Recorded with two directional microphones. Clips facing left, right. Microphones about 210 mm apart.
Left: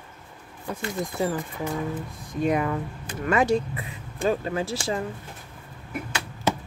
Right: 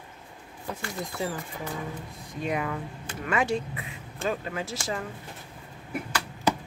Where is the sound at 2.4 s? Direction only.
45° left (ahead or behind).